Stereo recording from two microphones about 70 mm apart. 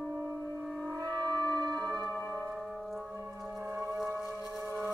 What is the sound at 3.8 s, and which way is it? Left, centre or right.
Whale vocalization, centre.